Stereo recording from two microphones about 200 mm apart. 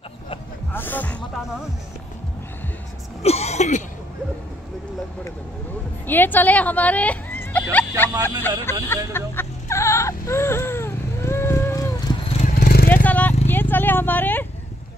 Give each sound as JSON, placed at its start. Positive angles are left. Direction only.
{"t": 0.7, "sound": "music", "side_deg": 10}
{"t": 3.2, "sound": "throat clearing", "side_deg": 30}
{"t": 6.0, "sound": "speech", "side_deg": 10}
{"t": 8.8, "sound": "chicken", "side_deg": 10}
{"t": 12.4, "sound": "vehicle", "side_deg": 35}
{"t": 13.0, "sound": "a sound", "side_deg": 10}
{"t": 13.5, "sound": "vehicle", "side_deg": 10}